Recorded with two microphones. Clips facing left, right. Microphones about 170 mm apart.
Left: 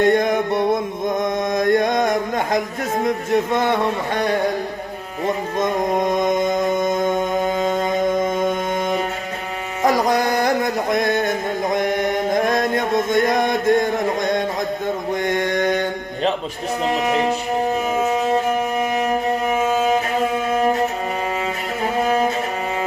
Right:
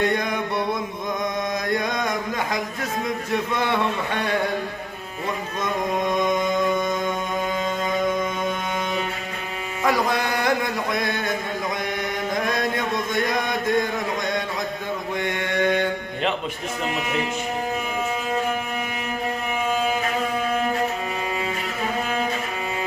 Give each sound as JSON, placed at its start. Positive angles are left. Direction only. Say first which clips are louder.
{"t": 0.0, "sound": "male singing", "louder": "left 7 dB", "side_deg": 45}
{"t": 3.0, "sound": "speech", "louder": "left 7 dB", "side_deg": 45}
{"t": 5.2, "sound": "music", "louder": "left 7 dB", "side_deg": 45}
{"t": 9.8, "sound": "a sound", "louder": "left 5 dB", "side_deg": 40}
{"t": 15.2, "sound": "mantra", "louder": "left 3 dB", "side_deg": 45}
{"t": 16.8, "sound": "speech", "louder": "left 7 dB", "side_deg": 35}
{"t": 18.8, "sound": "music", "louder": "left 8 dB", "side_deg": 40}
{"t": 22.0, "sound": "music", "louder": "left 11 dB", "side_deg": 40}